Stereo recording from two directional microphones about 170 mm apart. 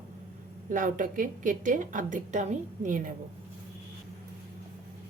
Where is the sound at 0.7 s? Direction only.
50° right (ahead or behind).